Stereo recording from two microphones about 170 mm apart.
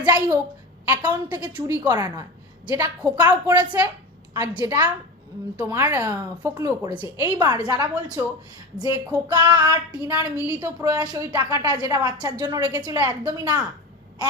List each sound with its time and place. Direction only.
0.0 s a woman's voice: 20° right (ahead or behind)